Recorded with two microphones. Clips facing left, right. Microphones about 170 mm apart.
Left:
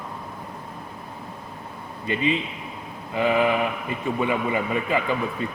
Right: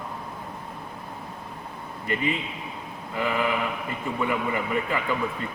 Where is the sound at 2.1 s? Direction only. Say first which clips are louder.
Left 3 dB; 20° left (ahead or behind).